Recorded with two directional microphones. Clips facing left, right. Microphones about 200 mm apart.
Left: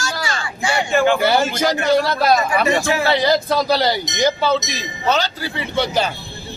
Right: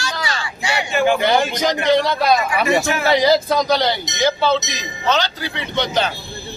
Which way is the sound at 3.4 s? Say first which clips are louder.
Even; 5° left (ahead or behind).